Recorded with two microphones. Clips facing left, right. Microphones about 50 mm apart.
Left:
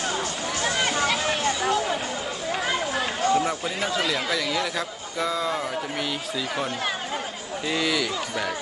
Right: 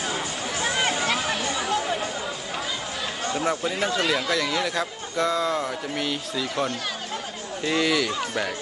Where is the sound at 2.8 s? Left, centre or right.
Centre.